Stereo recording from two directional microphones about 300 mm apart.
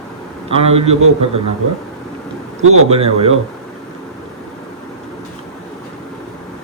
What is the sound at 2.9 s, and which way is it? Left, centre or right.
Speech, centre.